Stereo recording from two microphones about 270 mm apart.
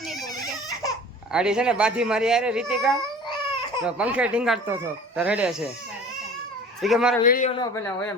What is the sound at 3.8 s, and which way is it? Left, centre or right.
Speech, centre.